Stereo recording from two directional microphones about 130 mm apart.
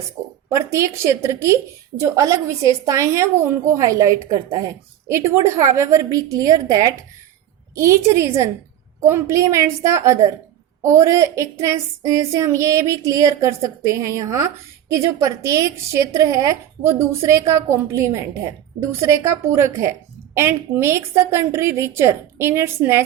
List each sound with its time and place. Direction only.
0.5 s speech: 20° right (ahead or behind)